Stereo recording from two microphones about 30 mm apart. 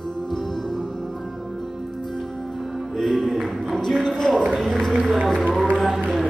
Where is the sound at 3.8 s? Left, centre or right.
Centre.